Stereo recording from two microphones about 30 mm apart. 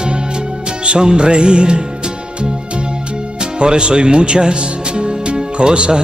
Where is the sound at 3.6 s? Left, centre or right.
Right.